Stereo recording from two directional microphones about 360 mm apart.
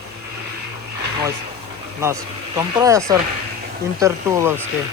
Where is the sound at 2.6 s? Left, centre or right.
Centre.